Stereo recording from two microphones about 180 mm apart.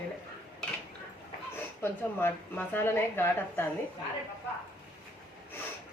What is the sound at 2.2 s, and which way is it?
A woman's voice, 10° left (ahead or behind).